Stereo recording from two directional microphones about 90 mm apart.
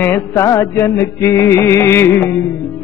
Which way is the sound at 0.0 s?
30° left (ahead or behind).